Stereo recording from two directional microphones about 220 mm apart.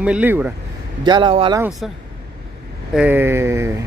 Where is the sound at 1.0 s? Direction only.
20° right (ahead or behind).